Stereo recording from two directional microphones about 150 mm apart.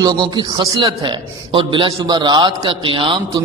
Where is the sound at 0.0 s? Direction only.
25° right (ahead or behind).